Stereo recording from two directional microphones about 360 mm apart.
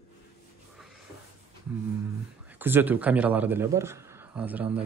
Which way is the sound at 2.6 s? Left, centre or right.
Centre.